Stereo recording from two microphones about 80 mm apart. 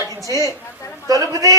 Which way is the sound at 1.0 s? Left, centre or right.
Right.